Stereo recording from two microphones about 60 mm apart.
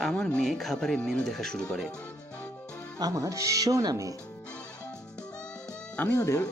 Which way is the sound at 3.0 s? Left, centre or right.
Right.